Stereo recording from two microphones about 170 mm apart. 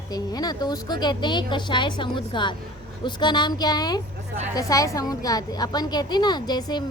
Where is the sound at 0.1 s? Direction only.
25° left (ahead or behind).